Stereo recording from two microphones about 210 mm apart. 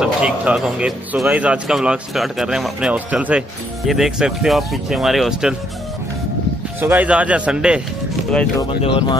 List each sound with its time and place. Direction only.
0.0 s speech: 5° right (ahead or behind)
6.8 s speech: 10° right (ahead or behind)
8.5 s speech: 25° left (ahead or behind)